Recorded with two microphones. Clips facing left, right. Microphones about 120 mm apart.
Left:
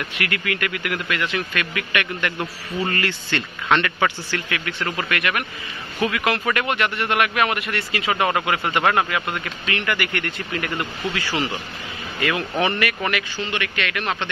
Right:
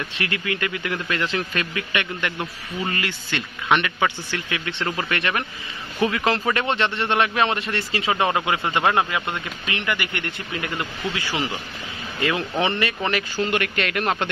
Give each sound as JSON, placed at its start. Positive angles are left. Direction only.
{"t": 0.2, "sound": "speech", "side_deg": -25}
{"t": 13.4, "sound": "speech", "side_deg": -45}